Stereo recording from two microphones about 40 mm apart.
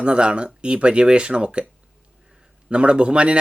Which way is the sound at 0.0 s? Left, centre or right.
Right.